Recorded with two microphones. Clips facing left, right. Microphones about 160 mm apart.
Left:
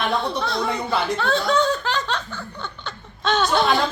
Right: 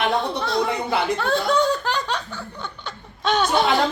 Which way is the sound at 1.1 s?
15° right (ahead or behind).